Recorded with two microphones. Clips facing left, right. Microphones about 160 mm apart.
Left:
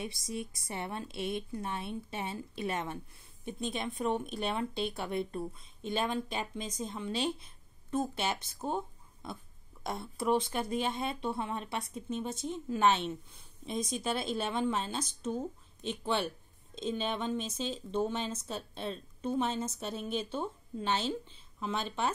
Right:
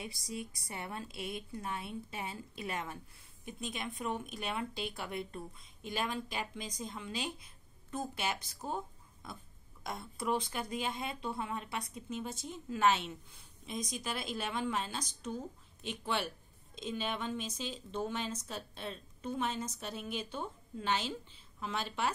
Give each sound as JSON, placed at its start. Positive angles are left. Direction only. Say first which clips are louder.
{"t": 0.0, "sound": "speech", "louder": "left 4 dB", "side_deg": 25}
{"t": 16.7, "sound": "speech", "louder": "left 4 dB", "side_deg": 25}